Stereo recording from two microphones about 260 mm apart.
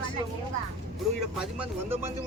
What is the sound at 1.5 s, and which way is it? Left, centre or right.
Speech, centre.